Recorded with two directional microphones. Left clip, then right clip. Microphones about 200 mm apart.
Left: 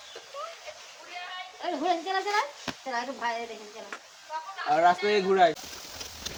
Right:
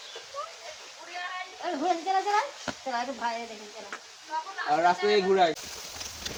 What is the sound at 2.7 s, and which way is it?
Stir, 5° left (ahead or behind).